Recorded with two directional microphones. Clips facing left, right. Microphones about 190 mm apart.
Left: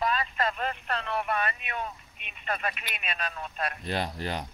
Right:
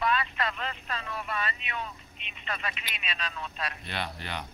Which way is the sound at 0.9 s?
65° left (ahead or behind).